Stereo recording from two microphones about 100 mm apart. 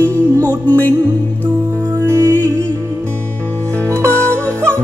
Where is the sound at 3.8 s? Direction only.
25° right (ahead or behind).